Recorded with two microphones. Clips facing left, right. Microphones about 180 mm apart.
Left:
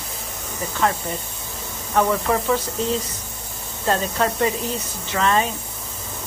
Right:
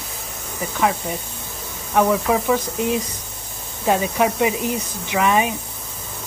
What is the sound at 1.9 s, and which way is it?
Speech, 5° right (ahead or behind).